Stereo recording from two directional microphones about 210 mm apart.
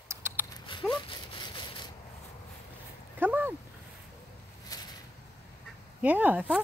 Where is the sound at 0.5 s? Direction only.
25° left (ahead or behind).